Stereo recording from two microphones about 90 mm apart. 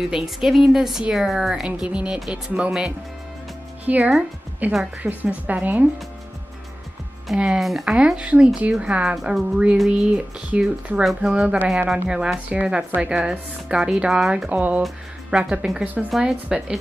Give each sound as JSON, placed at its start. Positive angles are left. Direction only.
{"t": 0.1, "sound": "a woman's voice", "side_deg": -5}
{"t": 7.3, "sound": "speech", "side_deg": -10}
{"t": 7.6, "sound": "a woman's voice", "side_deg": 0}
{"t": 14.5, "sound": "speech", "side_deg": -15}